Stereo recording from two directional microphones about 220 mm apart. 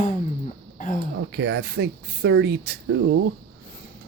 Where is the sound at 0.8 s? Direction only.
35° left (ahead or behind).